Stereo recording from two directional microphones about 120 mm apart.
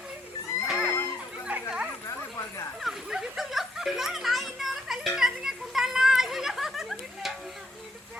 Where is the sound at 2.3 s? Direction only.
25° left (ahead or behind).